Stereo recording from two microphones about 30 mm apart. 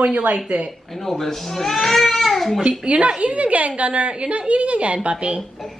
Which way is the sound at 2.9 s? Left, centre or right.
Right.